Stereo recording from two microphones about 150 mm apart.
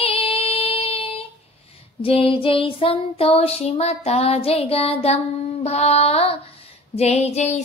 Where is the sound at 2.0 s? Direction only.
40° left (ahead or behind).